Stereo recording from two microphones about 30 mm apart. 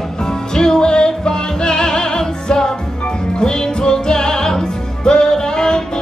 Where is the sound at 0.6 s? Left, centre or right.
Left.